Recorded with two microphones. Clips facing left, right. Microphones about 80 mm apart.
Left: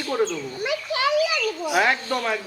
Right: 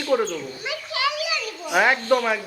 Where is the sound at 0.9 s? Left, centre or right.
Left.